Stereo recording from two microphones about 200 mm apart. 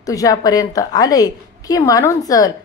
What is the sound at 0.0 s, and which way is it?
A woman's voice, 15° left (ahead or behind).